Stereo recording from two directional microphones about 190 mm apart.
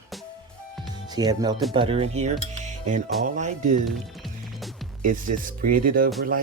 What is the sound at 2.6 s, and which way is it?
Music, 40° right (ahead or behind).